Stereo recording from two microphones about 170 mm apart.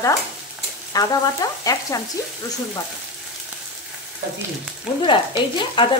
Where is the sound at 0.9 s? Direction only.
20° left (ahead or behind).